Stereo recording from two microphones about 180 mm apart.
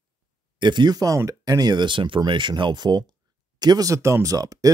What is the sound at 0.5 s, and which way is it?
Speech, 25° right (ahead or behind).